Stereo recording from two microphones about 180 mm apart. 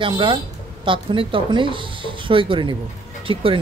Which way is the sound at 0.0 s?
30° right (ahead or behind).